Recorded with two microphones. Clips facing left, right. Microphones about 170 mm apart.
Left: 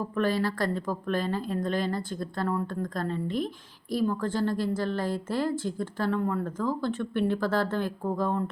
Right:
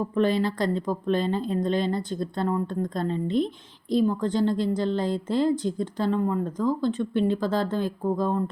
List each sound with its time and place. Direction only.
0.2 s a woman's voice: 20° right (ahead or behind)